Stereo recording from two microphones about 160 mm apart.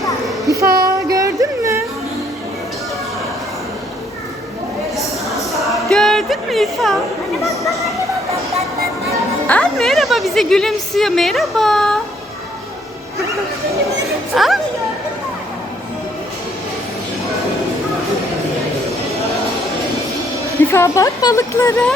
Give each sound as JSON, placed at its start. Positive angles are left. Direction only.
{"t": 0.4, "sound": "child singing", "side_deg": -20}
{"t": 0.8, "sound": "music", "side_deg": -20}
{"t": 4.9, "sound": "a sound", "side_deg": 0}
{"t": 9.5, "sound": "a woman's voice", "side_deg": 5}
{"t": 14.1, "sound": "a sound", "side_deg": 0}
{"t": 20.7, "sound": "a woman's voice", "side_deg": 15}